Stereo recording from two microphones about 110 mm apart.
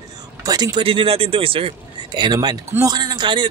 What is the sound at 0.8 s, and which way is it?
Speech, 60° right (ahead or behind).